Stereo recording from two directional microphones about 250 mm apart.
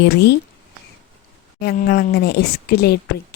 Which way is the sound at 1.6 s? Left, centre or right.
Left.